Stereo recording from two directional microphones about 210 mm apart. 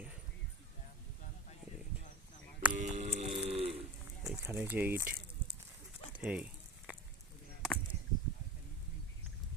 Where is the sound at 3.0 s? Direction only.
30° right (ahead or behind).